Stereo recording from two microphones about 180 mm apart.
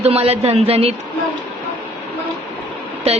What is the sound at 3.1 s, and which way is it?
Speech, 35° right (ahead or behind).